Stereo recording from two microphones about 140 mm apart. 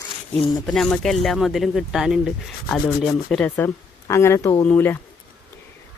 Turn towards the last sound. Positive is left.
turn(degrees=15)  # may be behind; listen again after turning